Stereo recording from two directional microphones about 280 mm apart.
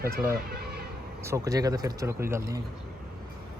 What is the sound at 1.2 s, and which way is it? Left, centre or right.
Speech, centre.